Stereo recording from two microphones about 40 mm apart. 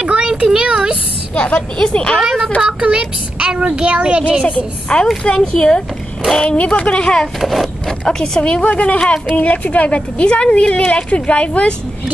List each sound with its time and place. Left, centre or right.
0.0 s a sound: right
1.3 s a woman's voice: left
2.6 s speech: right
4.9 s a woman's voice: left
6.4 s a woman's voice: left
7.3 s a child's voice: centre
8.4 s a woman's voice: left
9.3 s a woman's voice: left